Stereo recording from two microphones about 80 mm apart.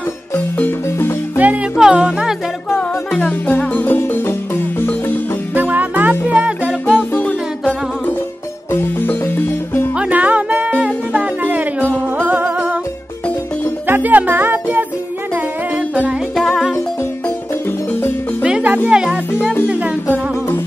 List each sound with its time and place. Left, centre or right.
0.6 s music: left
1.8 s music: centre
3.2 s music: left
5.5 s music: right
8.7 s music: left
9.9 s music: centre
13.8 s music: right
16.3 s music: centre
18.4 s music: centre
20.1 s music: left